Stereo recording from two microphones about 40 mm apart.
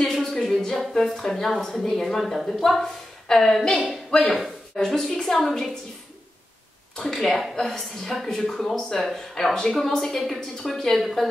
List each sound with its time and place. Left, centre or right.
0.0 s a sound: centre
0.7 s a woman's voice: centre
7.0 s a woman's voice: centre